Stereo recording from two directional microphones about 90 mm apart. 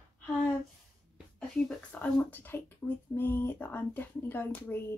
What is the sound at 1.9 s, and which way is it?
A woman's voice, 15° left (ahead or behind).